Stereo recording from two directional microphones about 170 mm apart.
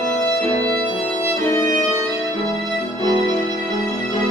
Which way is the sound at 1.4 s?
15° left (ahead or behind).